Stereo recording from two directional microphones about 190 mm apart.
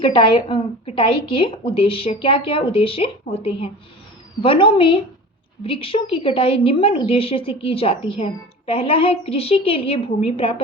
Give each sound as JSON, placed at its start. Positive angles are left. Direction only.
{"t": 0.0, "sound": "a woman's voice", "side_deg": 25}